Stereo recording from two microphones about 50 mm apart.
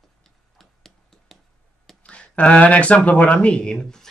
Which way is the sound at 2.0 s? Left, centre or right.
Left.